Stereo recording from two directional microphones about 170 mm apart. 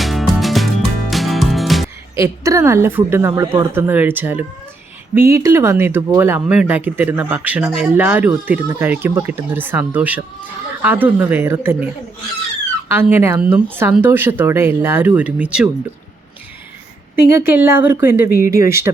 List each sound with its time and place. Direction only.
0.0 s music: centre (ahead or behind)
2.1 s speech: 15° right (ahead or behind)
12.9 s speech: 10° right (ahead or behind)
17.3 s speech: 10° right (ahead or behind)